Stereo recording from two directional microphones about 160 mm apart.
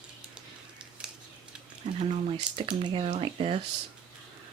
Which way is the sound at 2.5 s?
30° right (ahead or behind).